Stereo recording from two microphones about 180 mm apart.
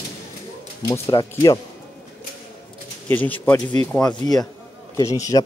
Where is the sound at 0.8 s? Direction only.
20° left (ahead or behind).